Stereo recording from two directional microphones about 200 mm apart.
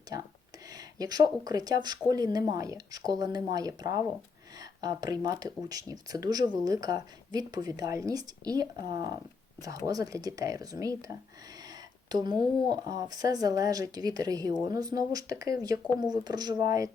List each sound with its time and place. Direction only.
0.7 s speech: 20° right (ahead or behind)